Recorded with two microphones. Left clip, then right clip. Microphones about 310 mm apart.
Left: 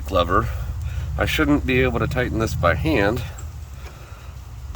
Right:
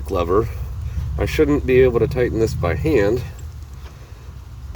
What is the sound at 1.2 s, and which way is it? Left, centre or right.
Speech, centre.